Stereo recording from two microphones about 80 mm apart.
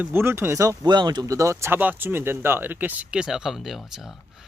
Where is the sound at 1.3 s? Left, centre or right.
Right.